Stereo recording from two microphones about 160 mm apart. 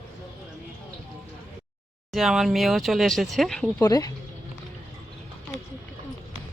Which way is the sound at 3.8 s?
25° left (ahead or behind).